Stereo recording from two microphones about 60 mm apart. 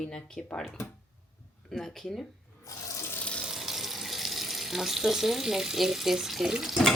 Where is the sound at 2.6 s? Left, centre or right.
Left.